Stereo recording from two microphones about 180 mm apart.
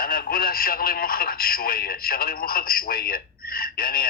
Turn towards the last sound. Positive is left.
turn(degrees=55)  # may be behind; listen again after turning